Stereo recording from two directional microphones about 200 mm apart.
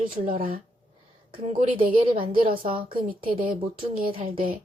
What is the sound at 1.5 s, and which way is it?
Speech, 35° right (ahead or behind).